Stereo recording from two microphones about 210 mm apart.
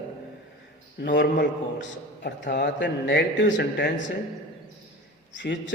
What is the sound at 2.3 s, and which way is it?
A man's voice, 55° left (ahead or behind).